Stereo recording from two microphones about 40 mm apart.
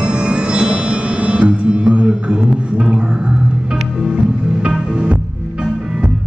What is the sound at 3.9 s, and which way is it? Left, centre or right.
Music, centre.